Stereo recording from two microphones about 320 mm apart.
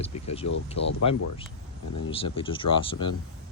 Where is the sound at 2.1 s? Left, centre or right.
Centre.